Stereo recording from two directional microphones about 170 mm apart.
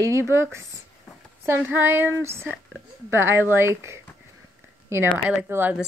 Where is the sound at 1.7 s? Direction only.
10° right (ahead or behind).